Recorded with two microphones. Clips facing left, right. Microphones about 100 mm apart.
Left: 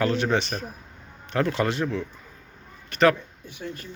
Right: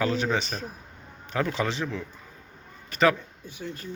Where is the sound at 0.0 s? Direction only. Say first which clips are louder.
Left 3 dB; 5° right (ahead or behind).